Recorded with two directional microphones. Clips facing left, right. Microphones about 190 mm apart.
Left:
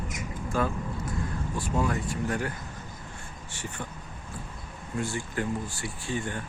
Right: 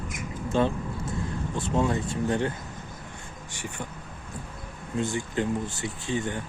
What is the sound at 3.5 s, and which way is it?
Speech, 15° right (ahead or behind).